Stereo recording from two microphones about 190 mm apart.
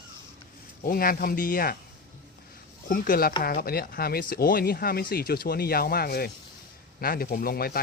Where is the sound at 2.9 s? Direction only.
50° left (ahead or behind).